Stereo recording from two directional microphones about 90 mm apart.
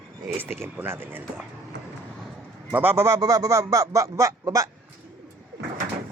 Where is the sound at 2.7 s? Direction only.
25° right (ahead or behind).